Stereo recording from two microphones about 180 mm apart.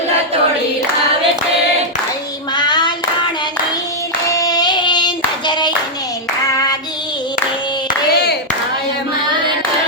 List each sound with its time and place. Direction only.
2.6 s hands: 25° left (ahead or behind)
4.3 s clapping: 20° left (ahead or behind)
7.9 s clapping: 65° left (ahead or behind)